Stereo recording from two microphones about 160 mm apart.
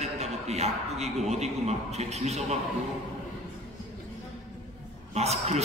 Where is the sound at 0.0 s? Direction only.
40° right (ahead or behind).